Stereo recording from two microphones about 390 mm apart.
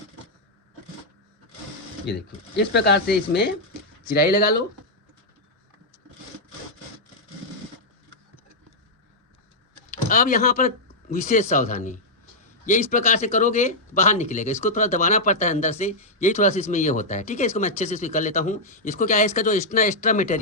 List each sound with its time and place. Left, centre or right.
2.0 s speech: left
9.9 s speech: centre